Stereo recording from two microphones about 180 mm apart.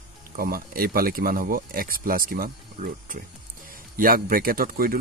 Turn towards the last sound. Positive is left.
turn(degrees=-50)  # may be behind; listen again after turning